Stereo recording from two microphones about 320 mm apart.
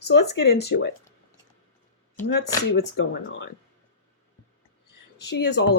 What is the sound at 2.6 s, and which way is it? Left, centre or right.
Speech, left.